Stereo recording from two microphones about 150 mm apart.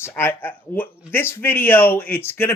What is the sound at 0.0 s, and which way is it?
Speech, 15° left (ahead or behind).